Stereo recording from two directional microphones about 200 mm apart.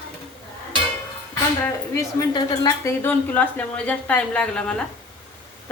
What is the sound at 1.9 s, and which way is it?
A woman's voice, 15° left (ahead or behind).